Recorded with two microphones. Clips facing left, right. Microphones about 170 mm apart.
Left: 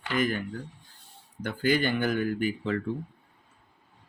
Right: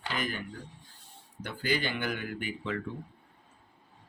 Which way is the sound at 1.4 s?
50° left (ahead or behind).